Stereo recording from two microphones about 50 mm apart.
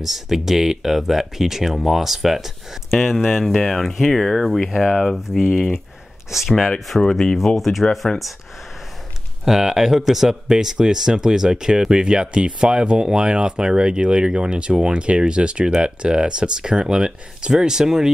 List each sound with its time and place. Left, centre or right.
0.0 s speech: centre
4.6 s speech: centre
4.9 s speech: centre
6.9 s speech: centre
9.4 s speech: centre